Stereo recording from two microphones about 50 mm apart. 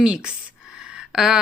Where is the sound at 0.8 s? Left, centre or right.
Centre.